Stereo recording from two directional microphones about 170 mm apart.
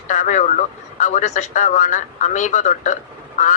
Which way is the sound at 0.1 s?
45° left (ahead or behind).